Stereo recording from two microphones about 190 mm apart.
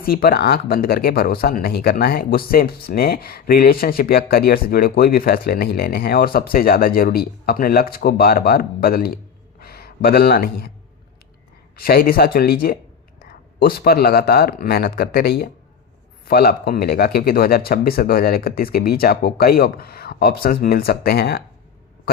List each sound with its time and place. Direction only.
0.0 s speech: 50° left (ahead or behind)
9.6 s a sound: 55° left (ahead or behind)
11.8 s speech: 50° left (ahead or behind)